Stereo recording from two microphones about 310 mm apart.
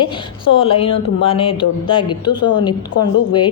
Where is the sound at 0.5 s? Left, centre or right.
Centre.